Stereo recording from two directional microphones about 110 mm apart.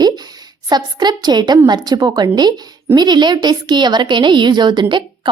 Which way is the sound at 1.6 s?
40° right (ahead or behind).